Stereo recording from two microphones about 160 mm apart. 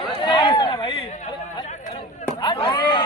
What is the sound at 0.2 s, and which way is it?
Chatter, 30° left (ahead or behind).